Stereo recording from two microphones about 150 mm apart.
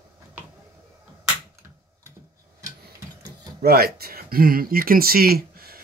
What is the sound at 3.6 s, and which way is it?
Speech, 90° right.